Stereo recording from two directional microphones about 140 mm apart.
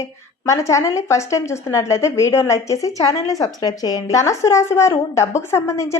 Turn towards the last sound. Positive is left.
turn(degrees=20)  # may be behind; listen again after turning